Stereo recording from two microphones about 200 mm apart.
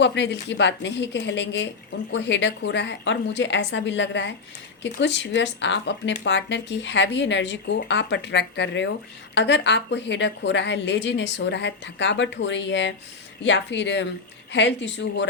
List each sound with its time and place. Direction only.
0.0 s a woman's voice: 60° left (ahead or behind)